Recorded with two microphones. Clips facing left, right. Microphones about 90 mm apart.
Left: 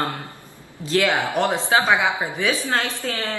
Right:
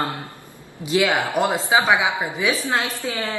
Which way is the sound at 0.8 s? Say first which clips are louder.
Right 1 dB; 10° right (ahead or behind).